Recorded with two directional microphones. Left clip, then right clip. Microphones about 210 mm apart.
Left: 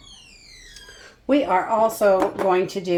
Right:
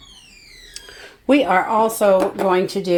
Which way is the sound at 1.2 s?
55° right (ahead or behind).